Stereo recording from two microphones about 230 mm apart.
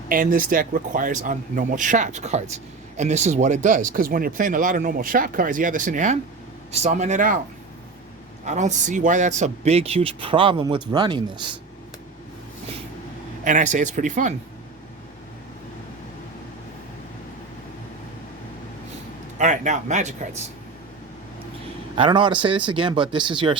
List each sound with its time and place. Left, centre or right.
0.1 s speech: right
8.4 s speech: right
13.4 s speech: right
19.4 s speech: right
21.9 s speech: right